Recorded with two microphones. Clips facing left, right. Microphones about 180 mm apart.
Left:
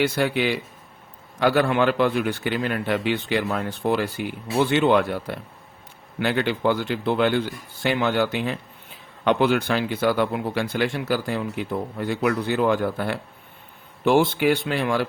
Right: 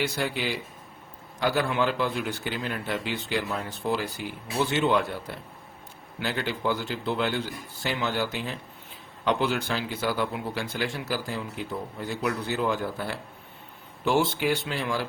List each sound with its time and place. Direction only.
0.0 s a man's voice: 60° left (ahead or behind)